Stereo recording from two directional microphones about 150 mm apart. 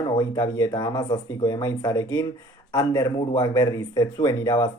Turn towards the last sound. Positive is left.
turn(degrees=25)  # may be behind; listen again after turning